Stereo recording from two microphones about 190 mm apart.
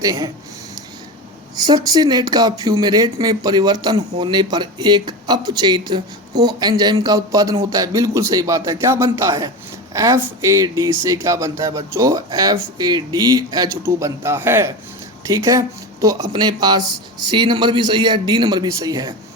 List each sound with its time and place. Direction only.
0.0 s speech: 15° right (ahead or behind)
1.5 s speech: 20° right (ahead or behind)